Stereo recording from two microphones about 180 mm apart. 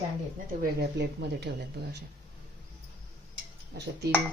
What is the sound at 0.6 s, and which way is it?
Speech, 65° right (ahead or behind).